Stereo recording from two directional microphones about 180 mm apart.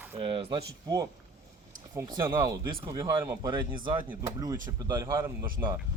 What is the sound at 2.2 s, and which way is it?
Speech, 15° right (ahead or behind).